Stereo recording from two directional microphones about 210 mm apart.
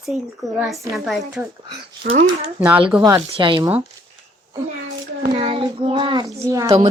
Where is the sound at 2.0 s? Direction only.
45° right (ahead or behind).